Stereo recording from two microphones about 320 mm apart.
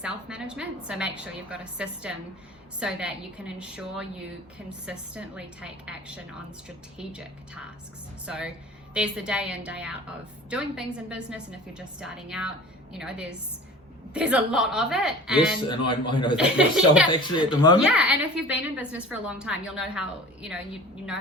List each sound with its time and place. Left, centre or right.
0.0 s a woman's voice: centre
8.3 s a woman's voice: centre
15.6 s a man's voice: centre
16.4 s a woman's voice: centre
17.1 s a man's voice: centre
17.7 s a woman's voice: centre